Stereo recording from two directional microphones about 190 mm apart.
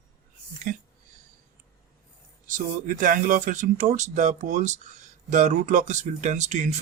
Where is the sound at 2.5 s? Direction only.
45° right (ahead or behind).